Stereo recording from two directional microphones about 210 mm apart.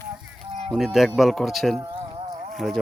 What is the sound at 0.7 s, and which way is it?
Speech, centre (ahead or behind).